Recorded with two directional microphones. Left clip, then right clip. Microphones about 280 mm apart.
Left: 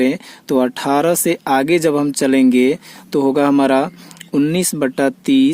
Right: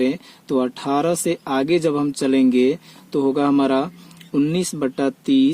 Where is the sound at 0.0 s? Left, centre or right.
Left.